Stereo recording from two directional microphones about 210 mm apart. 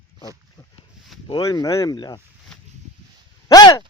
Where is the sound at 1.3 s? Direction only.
20° left (ahead or behind).